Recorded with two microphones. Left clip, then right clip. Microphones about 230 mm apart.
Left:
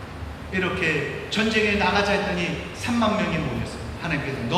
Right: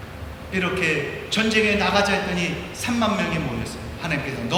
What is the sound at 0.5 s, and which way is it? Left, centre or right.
A man's voice, right.